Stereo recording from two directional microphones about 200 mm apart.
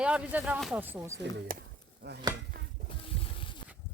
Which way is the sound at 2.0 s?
55° right (ahead or behind).